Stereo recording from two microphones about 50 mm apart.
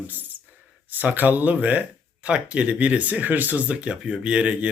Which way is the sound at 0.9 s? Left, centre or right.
Right.